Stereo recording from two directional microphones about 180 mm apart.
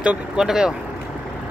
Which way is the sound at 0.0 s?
5° right (ahead or behind).